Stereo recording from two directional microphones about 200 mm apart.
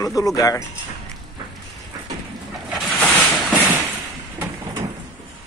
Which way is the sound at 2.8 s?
5° left (ahead or behind).